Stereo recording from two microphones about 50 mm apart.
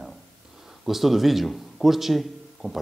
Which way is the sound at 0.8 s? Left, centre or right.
Centre.